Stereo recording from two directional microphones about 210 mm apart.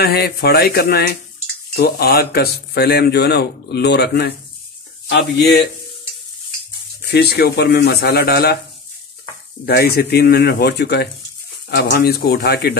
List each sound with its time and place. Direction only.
0.0 s speech: 50° left (ahead or behind)
7.1 s speech: 50° left (ahead or behind)
9.7 s speech: 50° left (ahead or behind)